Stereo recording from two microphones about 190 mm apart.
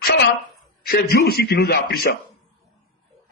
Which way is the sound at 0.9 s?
55° left (ahead or behind).